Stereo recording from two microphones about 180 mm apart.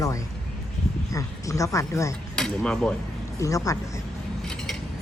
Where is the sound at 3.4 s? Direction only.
20° left (ahead or behind).